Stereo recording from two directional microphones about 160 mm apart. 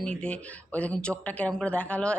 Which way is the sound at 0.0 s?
5° left (ahead or behind).